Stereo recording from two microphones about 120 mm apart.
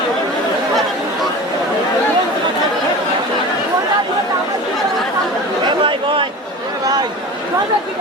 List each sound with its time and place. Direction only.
5.6 s chatter: 45° right (ahead or behind)